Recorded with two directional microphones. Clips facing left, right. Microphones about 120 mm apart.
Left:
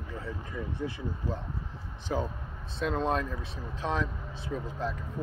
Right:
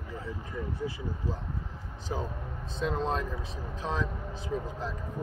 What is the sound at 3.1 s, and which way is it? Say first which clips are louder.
Speech: left 1 dB; 35° right (ahead or behind).